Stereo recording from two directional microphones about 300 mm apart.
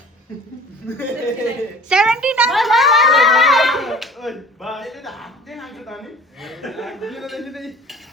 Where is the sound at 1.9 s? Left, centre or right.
Centre.